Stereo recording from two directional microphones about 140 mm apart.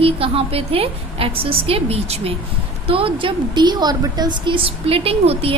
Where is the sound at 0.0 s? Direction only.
45° right (ahead or behind).